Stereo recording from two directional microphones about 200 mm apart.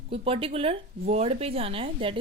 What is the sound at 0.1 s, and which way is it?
A woman's voice, 30° right (ahead or behind).